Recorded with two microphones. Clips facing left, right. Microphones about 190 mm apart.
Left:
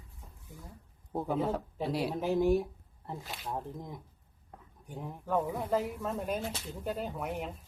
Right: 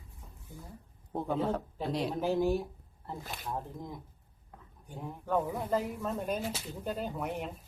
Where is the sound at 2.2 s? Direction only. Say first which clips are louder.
Left 2 dB; 30° right (ahead or behind).